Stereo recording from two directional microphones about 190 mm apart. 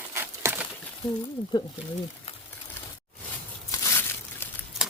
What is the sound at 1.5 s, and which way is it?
Speech, 25° left (ahead or behind).